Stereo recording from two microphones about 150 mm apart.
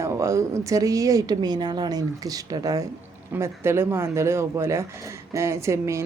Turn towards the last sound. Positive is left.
turn(degrees=-20)  # may be behind; listen again after turning